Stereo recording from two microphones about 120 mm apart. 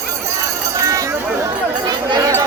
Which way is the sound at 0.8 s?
30° right (ahead or behind).